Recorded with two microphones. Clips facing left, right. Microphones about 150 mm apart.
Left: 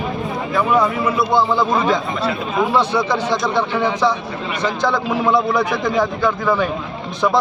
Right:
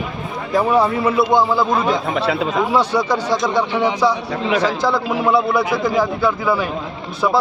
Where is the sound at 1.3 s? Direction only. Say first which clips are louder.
Left 2 dB; 5° right (ahead or behind).